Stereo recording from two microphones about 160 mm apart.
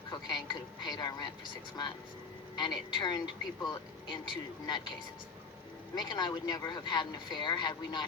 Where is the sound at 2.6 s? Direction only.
25° left (ahead or behind).